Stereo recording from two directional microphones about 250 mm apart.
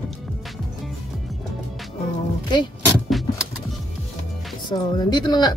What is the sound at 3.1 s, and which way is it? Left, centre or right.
Vehicle, centre.